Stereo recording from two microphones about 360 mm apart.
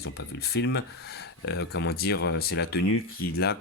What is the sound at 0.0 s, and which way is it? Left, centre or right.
Speech, left.